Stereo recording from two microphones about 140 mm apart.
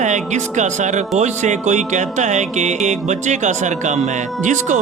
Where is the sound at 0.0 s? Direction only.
60° right (ahead or behind).